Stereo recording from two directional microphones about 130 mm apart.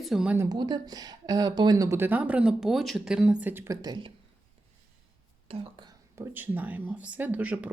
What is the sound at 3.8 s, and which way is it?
Speech, 35° right (ahead or behind).